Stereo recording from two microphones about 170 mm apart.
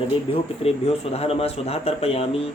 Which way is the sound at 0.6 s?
35° left (ahead or behind).